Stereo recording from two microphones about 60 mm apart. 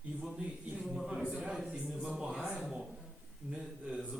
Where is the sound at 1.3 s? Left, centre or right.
Centre.